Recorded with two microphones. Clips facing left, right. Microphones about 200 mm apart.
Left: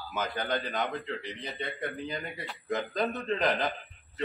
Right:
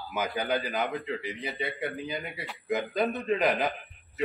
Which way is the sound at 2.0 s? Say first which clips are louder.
Right 1 dB; 15° right (ahead or behind).